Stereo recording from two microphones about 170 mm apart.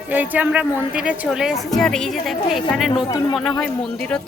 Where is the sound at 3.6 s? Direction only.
5° left (ahead or behind).